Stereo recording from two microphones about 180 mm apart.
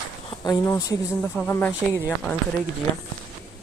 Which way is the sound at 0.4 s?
20° left (ahead or behind).